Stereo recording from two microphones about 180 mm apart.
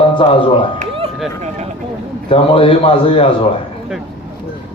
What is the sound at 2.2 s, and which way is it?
A man's voice, 30° left (ahead or behind).